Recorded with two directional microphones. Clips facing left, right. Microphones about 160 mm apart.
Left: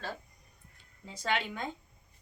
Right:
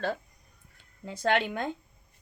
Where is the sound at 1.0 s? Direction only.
60° right (ahead or behind).